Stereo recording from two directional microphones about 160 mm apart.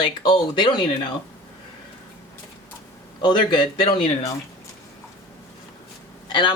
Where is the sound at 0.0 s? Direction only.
30° left (ahead or behind).